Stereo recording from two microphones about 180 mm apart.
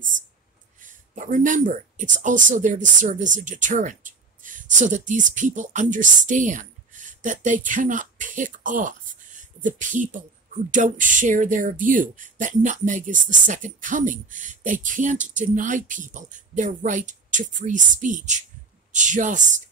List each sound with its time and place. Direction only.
0.8 s speech: 45° right (ahead or behind)